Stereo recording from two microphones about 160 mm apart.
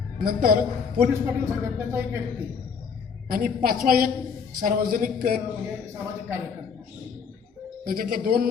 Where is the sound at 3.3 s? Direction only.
65° right (ahead or behind).